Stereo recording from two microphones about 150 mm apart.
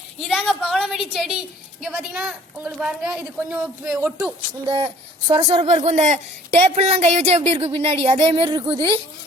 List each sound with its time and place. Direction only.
0.2 s a woman's voice: centre (ahead or behind)
5.3 s speech: 40° right (ahead or behind)